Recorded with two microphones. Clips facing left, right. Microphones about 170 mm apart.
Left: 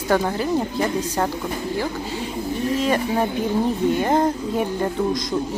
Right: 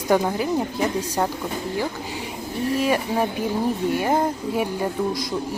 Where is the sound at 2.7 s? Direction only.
10° right (ahead or behind).